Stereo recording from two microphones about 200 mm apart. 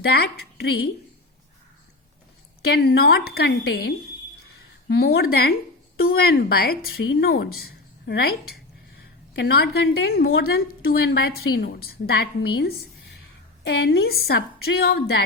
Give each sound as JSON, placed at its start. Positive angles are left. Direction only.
{"t": 0.0, "sound": "a woman's voice", "side_deg": 55}
{"t": 2.6, "sound": "a woman's voice", "side_deg": 55}